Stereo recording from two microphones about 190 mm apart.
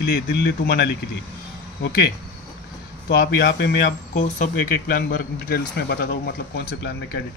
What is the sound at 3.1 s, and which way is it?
Speech, 55° left (ahead or behind).